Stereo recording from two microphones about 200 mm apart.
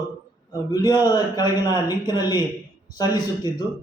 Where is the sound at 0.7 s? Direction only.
20° left (ahead or behind).